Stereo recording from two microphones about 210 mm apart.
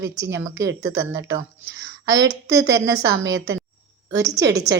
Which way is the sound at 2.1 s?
55° right (ahead or behind).